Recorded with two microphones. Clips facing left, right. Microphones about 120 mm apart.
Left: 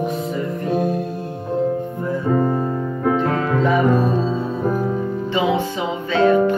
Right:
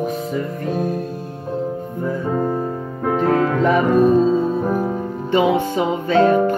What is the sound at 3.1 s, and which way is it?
Music, 45° right (ahead or behind).